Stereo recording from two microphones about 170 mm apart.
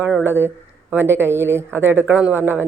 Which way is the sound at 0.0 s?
10° right (ahead or behind).